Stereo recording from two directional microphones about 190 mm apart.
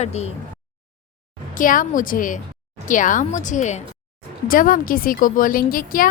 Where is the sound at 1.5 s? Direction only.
45° left (ahead or behind).